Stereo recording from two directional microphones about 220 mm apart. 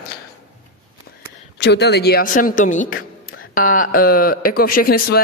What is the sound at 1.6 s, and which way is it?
Speech, 50° left (ahead or behind).